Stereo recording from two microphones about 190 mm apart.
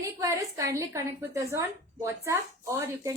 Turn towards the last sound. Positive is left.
turn(degrees=-15)  # may be behind; listen again after turning